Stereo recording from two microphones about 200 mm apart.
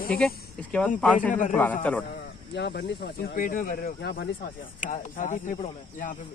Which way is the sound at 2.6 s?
60° left (ahead or behind).